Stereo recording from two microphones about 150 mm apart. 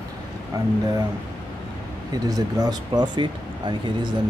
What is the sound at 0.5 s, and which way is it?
Speech, 25° right (ahead or behind).